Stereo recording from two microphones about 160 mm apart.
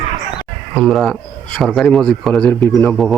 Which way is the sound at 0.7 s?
Centre (ahead or behind).